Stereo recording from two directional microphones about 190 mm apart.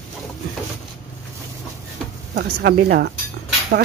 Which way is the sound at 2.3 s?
55° right (ahead or behind).